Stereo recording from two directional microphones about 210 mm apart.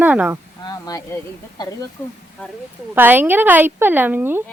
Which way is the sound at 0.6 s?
15° left (ahead or behind).